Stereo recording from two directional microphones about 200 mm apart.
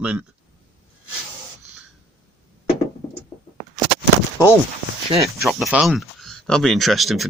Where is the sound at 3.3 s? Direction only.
5° left (ahead or behind).